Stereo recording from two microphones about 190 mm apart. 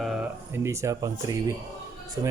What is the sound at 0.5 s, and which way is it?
Speech, 15° right (ahead or behind).